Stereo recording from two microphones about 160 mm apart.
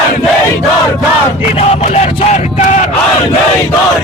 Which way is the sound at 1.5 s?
40° left (ahead or behind).